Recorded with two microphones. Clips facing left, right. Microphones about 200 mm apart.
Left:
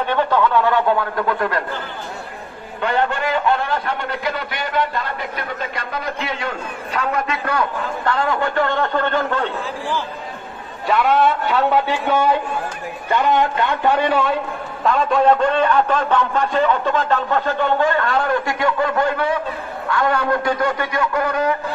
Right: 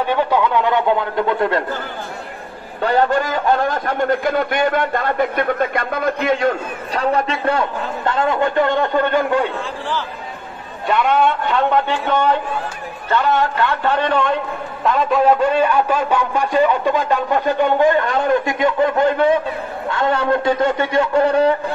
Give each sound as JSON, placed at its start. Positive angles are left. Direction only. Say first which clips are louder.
{"t": 0.1, "sound": "a man's voice", "louder": "left 1 dB", "side_deg": -15}
{"t": 2.8, "sound": "a man's voice", "louder": "right 4 dB", "side_deg": -40}
{"t": 10.9, "sound": "a man's voice", "louder": "even", "side_deg": 0}